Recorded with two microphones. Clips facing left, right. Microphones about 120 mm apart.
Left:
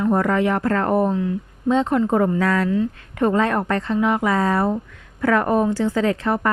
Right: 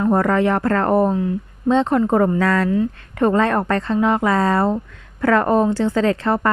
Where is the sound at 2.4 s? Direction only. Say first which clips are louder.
Right 2 dB; 65° right (ahead or behind).